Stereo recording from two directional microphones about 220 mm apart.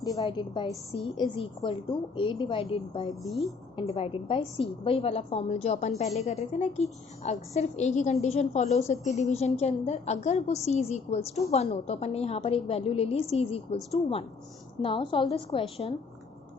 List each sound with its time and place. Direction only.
0.0 s a woman's voice: 15° left (ahead or behind)
3.2 s a woman's voice: centre (ahead or behind)
3.8 s a woman's voice: 25° left (ahead or behind)